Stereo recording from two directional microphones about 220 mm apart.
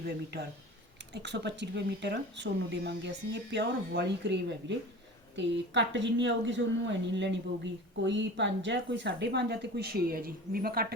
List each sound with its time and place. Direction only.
1.1 s speech: 50° right (ahead or behind)